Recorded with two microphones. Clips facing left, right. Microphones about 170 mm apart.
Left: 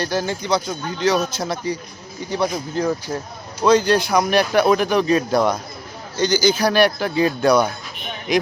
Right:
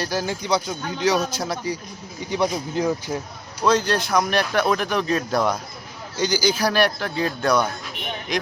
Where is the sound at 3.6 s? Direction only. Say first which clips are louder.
Left 5 dB; centre (ahead or behind).